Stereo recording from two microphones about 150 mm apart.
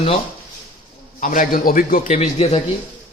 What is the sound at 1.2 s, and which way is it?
A man's voice, 60° left (ahead or behind).